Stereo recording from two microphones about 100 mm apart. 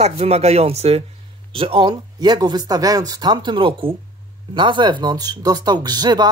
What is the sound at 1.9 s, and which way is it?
Speech, 45° right (ahead or behind).